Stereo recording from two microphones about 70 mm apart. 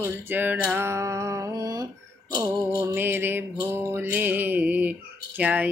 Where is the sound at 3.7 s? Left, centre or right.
Right.